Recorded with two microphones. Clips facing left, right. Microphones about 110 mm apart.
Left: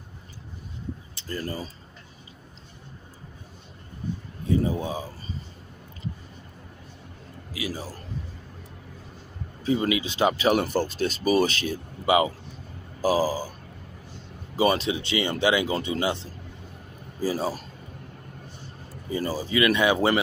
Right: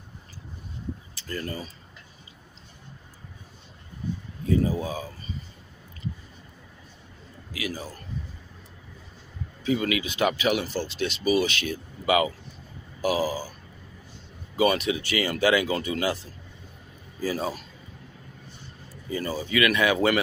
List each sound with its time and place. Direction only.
1.1 s speech: 30° left (ahead or behind)
4.6 s speech: 25° left (ahead or behind)
7.5 s speech: 25° left (ahead or behind)
9.7 s speech: 25° left (ahead or behind)
10.6 s speech: 50° left (ahead or behind); by 13.5 s 35° left (ahead or behind)
14.6 s speech: 30° left (ahead or behind)
19.1 s speech: 30° left (ahead or behind)